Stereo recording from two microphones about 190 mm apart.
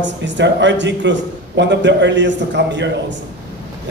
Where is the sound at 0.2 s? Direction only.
70° right (ahead or behind).